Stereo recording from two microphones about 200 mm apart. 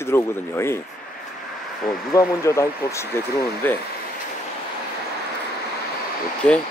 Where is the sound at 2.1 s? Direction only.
15° left (ahead or behind).